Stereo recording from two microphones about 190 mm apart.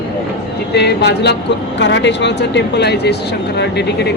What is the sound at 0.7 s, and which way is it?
Speech, 60° left (ahead or behind).